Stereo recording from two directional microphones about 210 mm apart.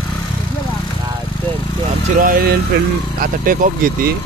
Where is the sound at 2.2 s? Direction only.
45° right (ahead or behind).